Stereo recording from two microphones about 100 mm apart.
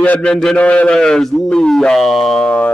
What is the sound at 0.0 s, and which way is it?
A man's voice, 15° left (ahead or behind).